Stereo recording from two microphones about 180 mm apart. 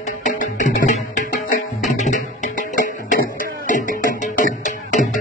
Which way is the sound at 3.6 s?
45° left (ahead or behind).